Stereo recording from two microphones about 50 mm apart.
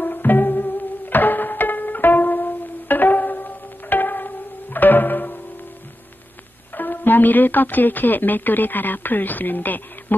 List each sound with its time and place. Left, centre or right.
0.0 s music: left
6.7 s a woman's voice: left